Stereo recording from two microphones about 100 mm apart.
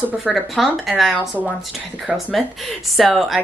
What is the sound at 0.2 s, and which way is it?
A woman's voice, centre (ahead or behind).